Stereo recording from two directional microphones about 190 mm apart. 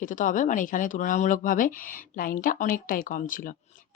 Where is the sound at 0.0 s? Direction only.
45° left (ahead or behind).